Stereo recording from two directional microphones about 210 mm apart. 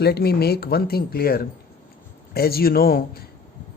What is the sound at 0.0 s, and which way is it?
Speech, 50° left (ahead or behind).